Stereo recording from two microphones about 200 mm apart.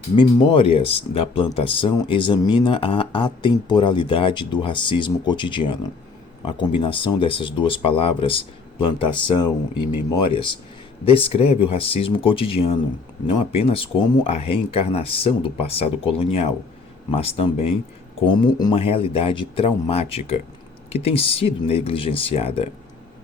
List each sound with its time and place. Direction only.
0.2 s speech: 25° left (ahead or behind)